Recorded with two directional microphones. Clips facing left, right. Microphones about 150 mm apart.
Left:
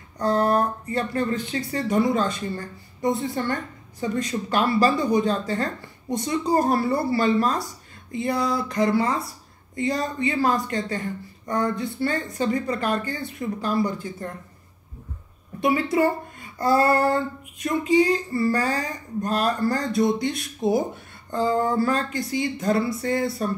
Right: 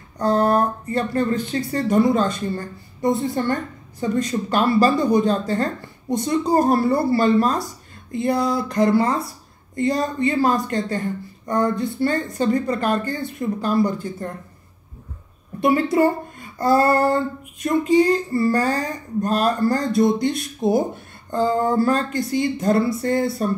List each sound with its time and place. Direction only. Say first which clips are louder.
0.2 s speech: right 3 dB; 35° right (ahead or behind)
15.6 s speech: right 4 dB; 45° right (ahead or behind)
21.3 s speech: right 3 dB; 40° right (ahead or behind)